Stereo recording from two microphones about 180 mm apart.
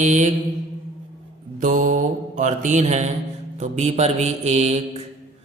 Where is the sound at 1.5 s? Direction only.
45° right (ahead or behind).